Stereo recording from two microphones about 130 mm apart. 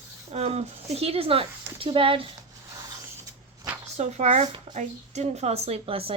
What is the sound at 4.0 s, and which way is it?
A woman's voice, 60° right (ahead or behind).